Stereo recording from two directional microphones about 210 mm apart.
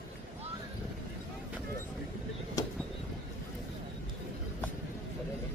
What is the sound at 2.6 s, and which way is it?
Vehicle, 15° left (ahead or behind).